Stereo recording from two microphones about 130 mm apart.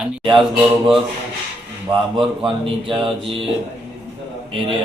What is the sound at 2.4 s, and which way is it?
Mantra, 40° right (ahead or behind).